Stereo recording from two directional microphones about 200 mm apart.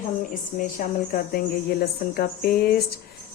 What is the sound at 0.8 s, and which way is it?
Speech, 40° left (ahead or behind).